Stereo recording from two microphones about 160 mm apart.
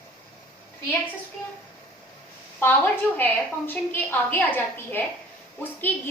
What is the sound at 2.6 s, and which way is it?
A woman's voice, 15° left (ahead or behind).